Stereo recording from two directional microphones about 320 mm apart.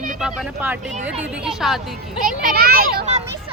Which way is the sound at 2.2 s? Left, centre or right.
Right.